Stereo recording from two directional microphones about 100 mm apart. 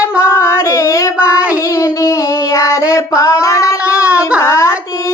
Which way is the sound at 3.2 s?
30° left (ahead or behind).